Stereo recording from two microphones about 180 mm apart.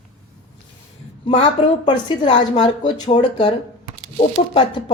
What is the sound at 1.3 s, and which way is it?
A woman's voice, 30° left (ahead or behind).